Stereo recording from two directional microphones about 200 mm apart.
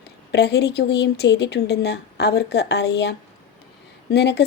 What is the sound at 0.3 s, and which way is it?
Speech, 55° left (ahead or behind).